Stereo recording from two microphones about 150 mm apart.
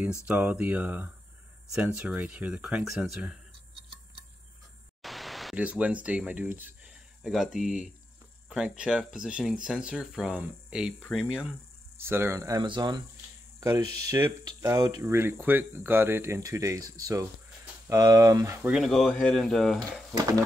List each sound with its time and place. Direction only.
0.3 s speech: 10° right (ahead or behind)
5.0 s speech: centre (ahead or behind)
12.0 s speech: 15° right (ahead or behind)
18.7 s speech: centre (ahead or behind)